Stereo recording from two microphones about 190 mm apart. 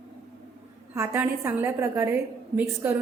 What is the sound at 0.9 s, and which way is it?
A woman's voice, 15° right (ahead or behind).